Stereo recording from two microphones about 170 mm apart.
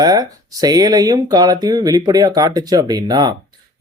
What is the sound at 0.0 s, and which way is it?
Speech, 20° right (ahead or behind).